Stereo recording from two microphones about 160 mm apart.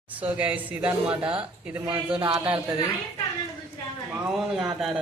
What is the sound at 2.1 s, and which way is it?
Speech, 30° right (ahead or behind).